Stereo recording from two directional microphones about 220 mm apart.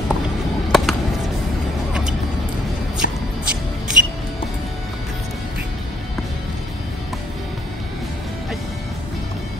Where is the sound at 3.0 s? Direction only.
40° left (ahead or behind).